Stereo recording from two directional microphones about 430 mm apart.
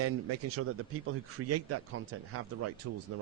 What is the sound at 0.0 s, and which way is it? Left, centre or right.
A man's voice, right.